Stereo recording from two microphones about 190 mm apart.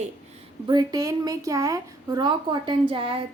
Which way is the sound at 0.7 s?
20° right (ahead or behind).